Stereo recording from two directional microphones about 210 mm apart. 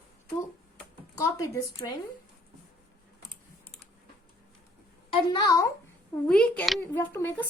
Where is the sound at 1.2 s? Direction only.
15° left (ahead or behind).